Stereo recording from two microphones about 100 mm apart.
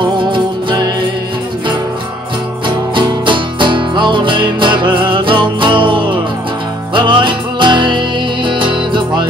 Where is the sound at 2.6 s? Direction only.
50° right (ahead or behind).